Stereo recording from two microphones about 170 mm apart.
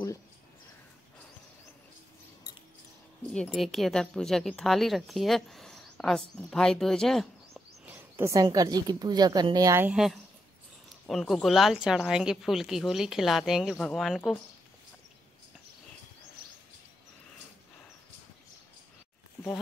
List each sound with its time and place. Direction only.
3.3 s a woman's voice: centre (ahead or behind)
7.8 s a woman's voice: 10° right (ahead or behind)
11.1 s a woman's voice: centre (ahead or behind)